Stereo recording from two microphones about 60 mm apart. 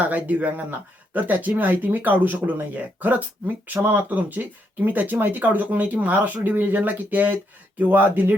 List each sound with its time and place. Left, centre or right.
0.0 s speech: right